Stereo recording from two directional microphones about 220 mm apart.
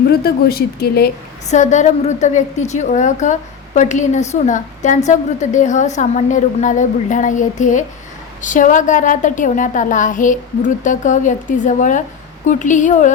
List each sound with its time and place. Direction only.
0.1 s speech: 45° left (ahead or behind)
1.5 s a woman's voice: 35° left (ahead or behind)